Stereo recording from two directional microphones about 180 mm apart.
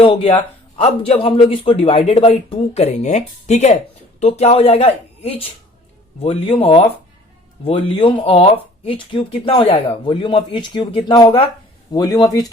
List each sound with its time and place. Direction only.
0.0 s speech: 30° left (ahead or behind)